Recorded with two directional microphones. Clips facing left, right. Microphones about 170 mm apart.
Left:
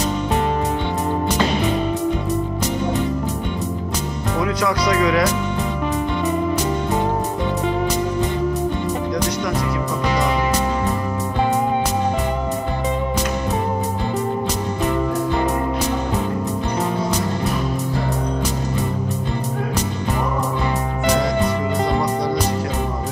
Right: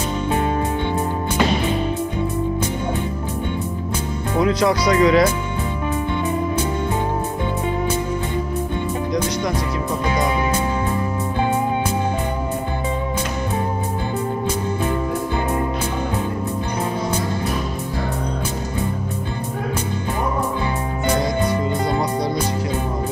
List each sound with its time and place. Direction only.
4.4 s speech: 30° right (ahead or behind)